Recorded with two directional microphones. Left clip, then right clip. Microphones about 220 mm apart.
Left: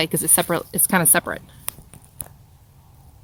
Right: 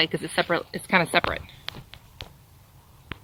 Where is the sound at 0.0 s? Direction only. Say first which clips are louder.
Left 2 dB; 35° left (ahead or behind).